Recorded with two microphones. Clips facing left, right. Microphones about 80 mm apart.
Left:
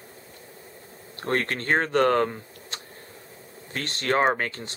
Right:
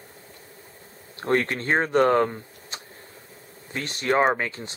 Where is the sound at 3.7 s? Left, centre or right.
Centre.